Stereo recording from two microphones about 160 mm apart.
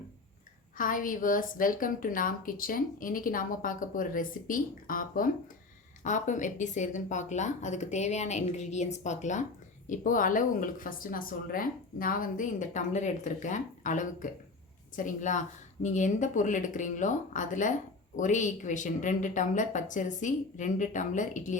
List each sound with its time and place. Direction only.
0.8 s a woman's voice: 60° left (ahead or behind)